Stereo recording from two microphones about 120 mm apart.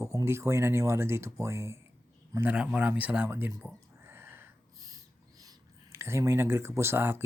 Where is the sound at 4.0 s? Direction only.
20° right (ahead or behind).